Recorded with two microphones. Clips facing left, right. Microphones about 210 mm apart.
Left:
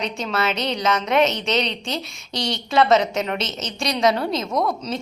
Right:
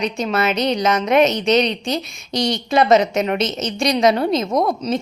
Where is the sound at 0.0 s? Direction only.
15° right (ahead or behind).